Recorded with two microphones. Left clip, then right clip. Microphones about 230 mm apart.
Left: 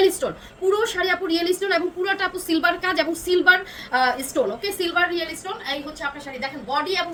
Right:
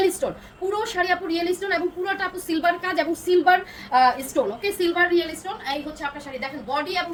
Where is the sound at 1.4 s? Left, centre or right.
Left.